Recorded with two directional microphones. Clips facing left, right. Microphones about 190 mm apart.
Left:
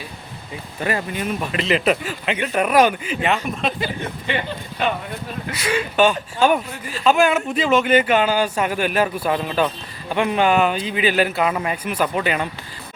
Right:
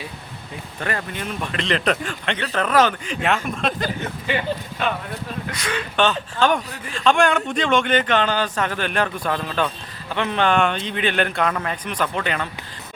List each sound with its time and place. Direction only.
0.8 s speech: 10° left (ahead or behind)
5.5 s speech: 5° left (ahead or behind)